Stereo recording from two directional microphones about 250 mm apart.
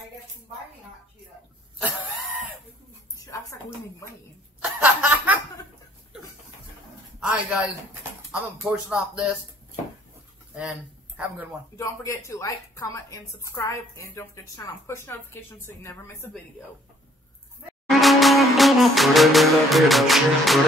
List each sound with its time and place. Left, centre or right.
1.8 s a sound: centre
3.3 s a sound: centre
4.6 s snicker: centre
7.2 s a man's voice: centre
11.1 s speech: centre
11.7 s a woman's voice: centre
17.8 s music: centre